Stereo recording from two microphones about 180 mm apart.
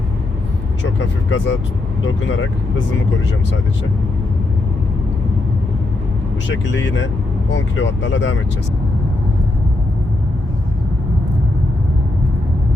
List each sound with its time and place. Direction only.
0.9 s speech: 90° left
6.5 s speech: 90° left